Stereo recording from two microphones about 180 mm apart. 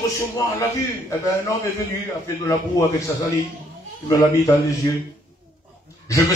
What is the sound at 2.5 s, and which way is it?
Speech, 15° left (ahead or behind).